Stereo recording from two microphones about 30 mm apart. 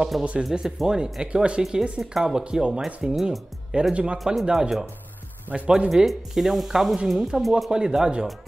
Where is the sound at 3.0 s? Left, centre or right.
Right.